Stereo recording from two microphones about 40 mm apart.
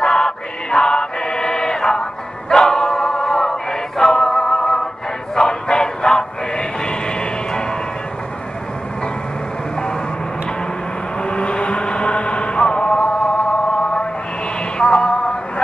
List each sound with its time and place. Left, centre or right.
0.0 s chant: centre
2.5 s choir: centre
4.0 s music: centre
11.2 s vehicle: left
14.8 s a sound: left